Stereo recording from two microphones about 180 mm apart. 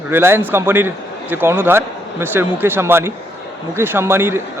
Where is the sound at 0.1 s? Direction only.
10° right (ahead or behind).